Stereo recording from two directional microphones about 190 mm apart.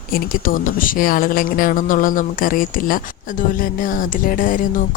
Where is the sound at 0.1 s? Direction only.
50° left (ahead or behind).